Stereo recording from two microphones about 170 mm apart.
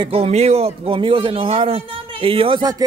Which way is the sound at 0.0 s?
35° right (ahead or behind).